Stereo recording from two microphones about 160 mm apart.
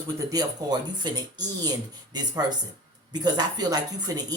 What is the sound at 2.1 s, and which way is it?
Speech, 25° right (ahead or behind).